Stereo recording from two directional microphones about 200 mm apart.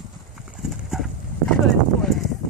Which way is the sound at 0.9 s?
Centre (ahead or behind).